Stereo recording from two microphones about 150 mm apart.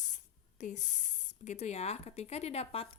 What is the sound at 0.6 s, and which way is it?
A woman's voice, 55° left (ahead or behind).